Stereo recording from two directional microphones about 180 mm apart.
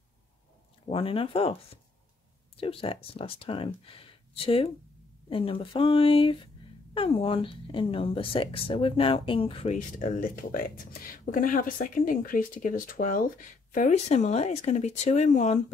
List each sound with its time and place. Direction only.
0.8 s speech: 30° left (ahead or behind)
9.8 s speech: 50° left (ahead or behind)